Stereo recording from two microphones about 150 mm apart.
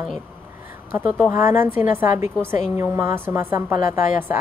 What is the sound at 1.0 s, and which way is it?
A woman's voice, 15° right (ahead or behind).